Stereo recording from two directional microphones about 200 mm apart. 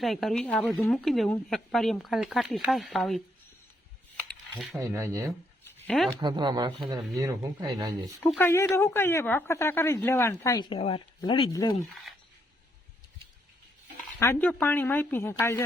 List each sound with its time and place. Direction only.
0.0 s speech: centre (ahead or behind)
4.3 s a sound: 5° left (ahead or behind)
4.8 s speech: 15° right (ahead or behind)
5.9 s speech: 5° left (ahead or behind)
6.1 s speech: 20° right (ahead or behind)
8.3 s a woman's voice: 10° left (ahead or behind)
14.2 s a woman's voice: 10° left (ahead or behind)